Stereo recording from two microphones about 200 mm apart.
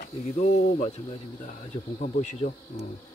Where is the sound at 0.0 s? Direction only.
50° left (ahead or behind).